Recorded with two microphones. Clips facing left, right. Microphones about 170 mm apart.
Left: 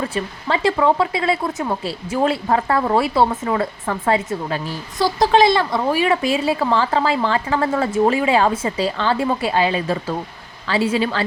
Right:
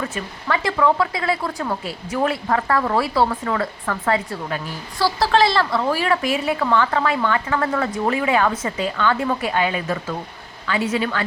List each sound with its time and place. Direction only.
0.0 s speech: 25° left (ahead or behind)